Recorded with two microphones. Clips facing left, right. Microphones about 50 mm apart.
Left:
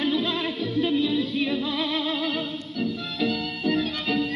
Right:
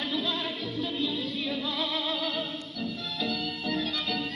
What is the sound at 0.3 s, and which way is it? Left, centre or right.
Music, left.